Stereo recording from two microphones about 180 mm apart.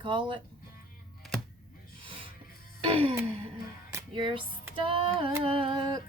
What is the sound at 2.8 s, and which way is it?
Music, 30° right (ahead or behind).